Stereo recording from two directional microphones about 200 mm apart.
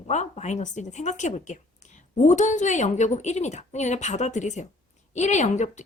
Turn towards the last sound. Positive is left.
turn(degrees=35)  # may be behind; listen again after turning